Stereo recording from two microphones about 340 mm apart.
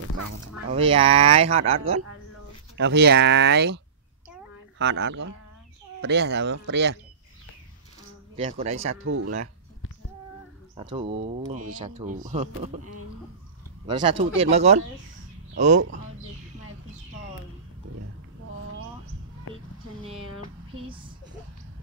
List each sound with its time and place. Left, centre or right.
0.7 s speech: centre
2.8 s speech: right
8.5 s speech: centre
9.0 s speech: right
10.8 s speech: centre
13.8 s speech: centre
15.7 s speech: right